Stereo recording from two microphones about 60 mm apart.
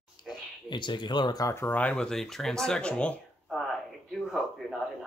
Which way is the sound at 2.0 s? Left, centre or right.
Centre.